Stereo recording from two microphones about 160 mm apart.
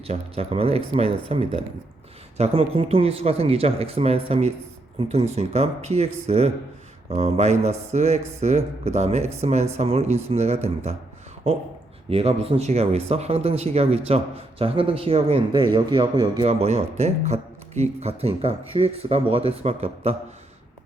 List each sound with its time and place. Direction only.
0.1 s speech: 40° right (ahead or behind)
12.1 s speech: 40° right (ahead or behind)